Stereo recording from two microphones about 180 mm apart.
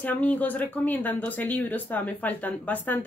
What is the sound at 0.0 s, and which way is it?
Speech, 10° left (ahead or behind).